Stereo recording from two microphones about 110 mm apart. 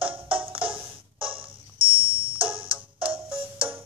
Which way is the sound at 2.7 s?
10° right (ahead or behind).